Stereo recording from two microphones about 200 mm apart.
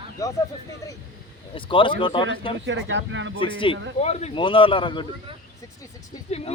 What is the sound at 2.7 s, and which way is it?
Speech, 70° right (ahead or behind).